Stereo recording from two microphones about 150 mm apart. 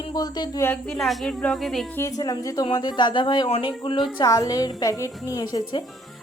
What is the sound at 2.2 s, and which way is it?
A woman's voice, 25° left (ahead or behind).